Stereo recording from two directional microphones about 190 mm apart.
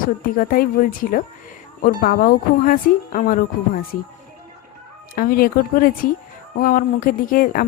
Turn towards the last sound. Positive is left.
turn(degrees=45)  # may be behind; listen again after turning